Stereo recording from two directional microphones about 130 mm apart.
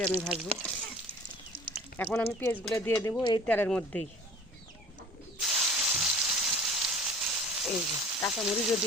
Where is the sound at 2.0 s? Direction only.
15° left (ahead or behind).